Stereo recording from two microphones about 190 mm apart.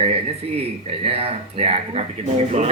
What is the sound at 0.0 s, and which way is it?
Speech, 30° right (ahead or behind).